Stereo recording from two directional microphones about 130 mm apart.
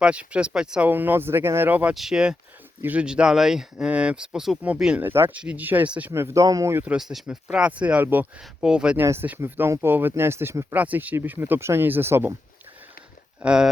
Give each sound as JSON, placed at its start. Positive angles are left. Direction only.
{"t": 0.0, "sound": "speech", "side_deg": -10}
{"t": 6.9, "sound": "speech", "side_deg": 0}
{"t": 13.4, "sound": "speech", "side_deg": -5}